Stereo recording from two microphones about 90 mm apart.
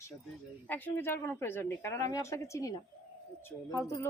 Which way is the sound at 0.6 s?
20° left (ahead or behind).